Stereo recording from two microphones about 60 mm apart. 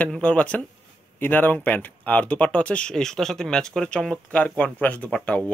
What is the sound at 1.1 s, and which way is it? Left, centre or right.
Speech, left.